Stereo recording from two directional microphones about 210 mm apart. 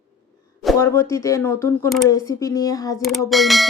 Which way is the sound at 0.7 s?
10° left (ahead or behind).